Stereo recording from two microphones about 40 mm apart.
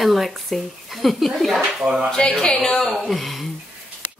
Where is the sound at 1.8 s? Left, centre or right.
Centre.